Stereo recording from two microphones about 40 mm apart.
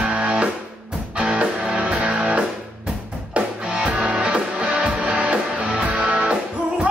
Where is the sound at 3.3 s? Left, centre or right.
Right.